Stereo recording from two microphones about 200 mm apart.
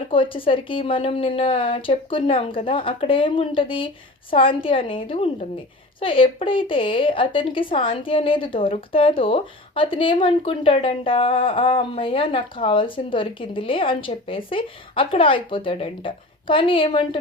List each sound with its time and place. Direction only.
0.1 s a woman's voice: 25° left (ahead or behind)